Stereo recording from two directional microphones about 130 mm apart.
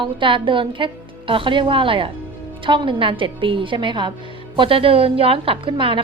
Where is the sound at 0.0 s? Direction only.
40° right (ahead or behind).